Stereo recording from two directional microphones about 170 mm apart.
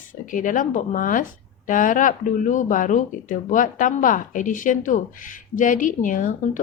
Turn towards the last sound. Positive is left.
turn(degrees=50)  # may be behind; listen again after turning